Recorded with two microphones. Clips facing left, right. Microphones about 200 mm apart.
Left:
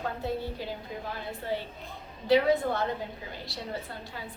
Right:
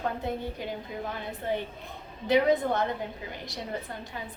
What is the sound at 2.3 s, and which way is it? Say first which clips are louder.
A woman's voice: even; 20° right (ahead or behind).